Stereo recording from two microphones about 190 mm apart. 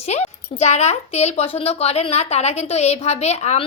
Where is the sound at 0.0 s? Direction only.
35° left (ahead or behind).